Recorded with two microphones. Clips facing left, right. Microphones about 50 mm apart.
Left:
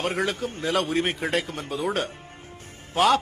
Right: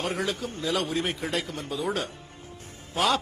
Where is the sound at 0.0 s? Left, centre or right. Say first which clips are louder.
Left 3 dB; left.